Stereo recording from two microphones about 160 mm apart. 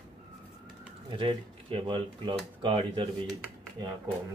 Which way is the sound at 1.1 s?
30° right (ahead or behind).